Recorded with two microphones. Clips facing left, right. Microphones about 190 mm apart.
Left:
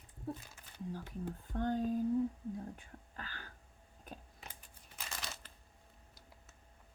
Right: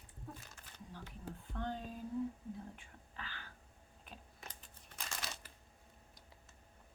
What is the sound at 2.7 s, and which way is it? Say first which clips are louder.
Whispering: left 2 dB; 45° left (ahead or behind).